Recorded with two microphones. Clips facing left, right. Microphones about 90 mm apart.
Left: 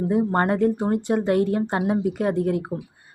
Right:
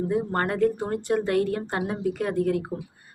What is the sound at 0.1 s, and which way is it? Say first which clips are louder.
A woman's voice: left 8 dB; 20° left (ahead or behind).